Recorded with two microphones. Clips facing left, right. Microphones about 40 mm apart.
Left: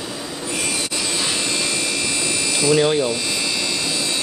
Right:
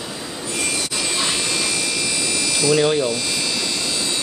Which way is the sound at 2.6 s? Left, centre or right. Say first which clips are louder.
Left 1 dB; centre.